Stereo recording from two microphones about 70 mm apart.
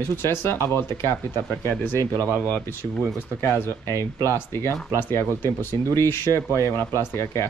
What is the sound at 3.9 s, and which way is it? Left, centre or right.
Speech, right.